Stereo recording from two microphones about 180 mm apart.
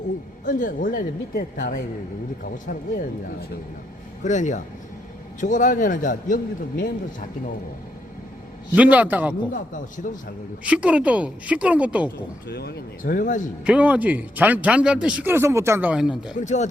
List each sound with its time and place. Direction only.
0.4 s a man's voice: 45° left (ahead or behind)
4.2 s a man's voice: 40° left (ahead or behind)
8.7 s speech: 10° right (ahead or behind)
10.6 s speech: 5° right (ahead or behind)
12.5 s a man's voice: 65° left (ahead or behind)
13.7 s speech: 5° right (ahead or behind)
16.4 s speech: 40° left (ahead or behind)